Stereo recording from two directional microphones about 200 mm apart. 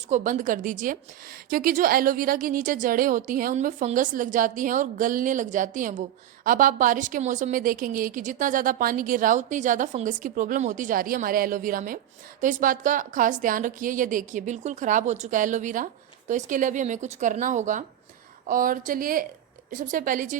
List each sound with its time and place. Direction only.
0.1 s a woman's voice: 40° right (ahead or behind)